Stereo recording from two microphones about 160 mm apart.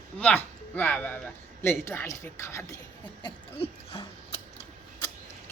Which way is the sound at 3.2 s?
35° left (ahead or behind).